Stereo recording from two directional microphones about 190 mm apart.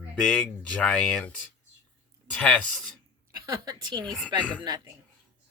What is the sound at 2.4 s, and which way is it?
Speech, 5° left (ahead or behind).